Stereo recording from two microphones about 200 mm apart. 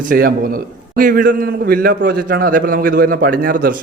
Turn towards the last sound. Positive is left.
turn(degrees=-45)  # may be behind; listen again after turning